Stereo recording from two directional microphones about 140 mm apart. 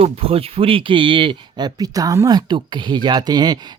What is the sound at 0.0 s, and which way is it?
Speech, 45° right (ahead or behind).